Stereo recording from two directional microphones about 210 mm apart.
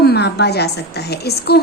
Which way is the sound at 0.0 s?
50° left (ahead or behind).